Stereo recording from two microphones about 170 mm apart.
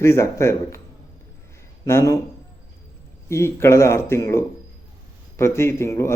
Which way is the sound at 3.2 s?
15° left (ahead or behind).